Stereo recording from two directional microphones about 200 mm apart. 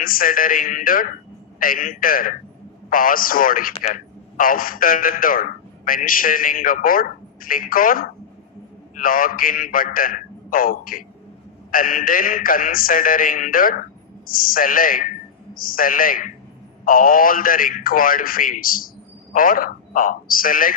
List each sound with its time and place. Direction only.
0.0 s a man's voice: 45° left (ahead or behind)